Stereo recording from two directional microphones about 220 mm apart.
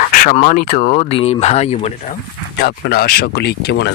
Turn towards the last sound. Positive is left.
turn(degrees=50)  # may be behind; listen again after turning